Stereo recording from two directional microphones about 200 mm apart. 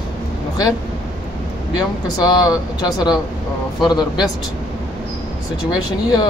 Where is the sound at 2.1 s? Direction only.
20° left (ahead or behind).